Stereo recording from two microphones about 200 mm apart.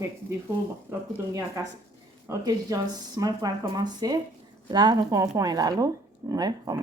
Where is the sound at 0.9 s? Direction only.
10° right (ahead or behind).